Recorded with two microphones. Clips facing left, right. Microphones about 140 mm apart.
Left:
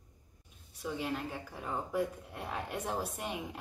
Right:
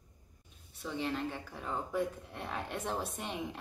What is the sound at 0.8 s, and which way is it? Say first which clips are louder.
A woman's voice: right 1 dB; 5° left (ahead or behind).